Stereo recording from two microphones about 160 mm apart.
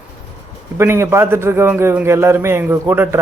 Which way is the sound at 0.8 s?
15° right (ahead or behind).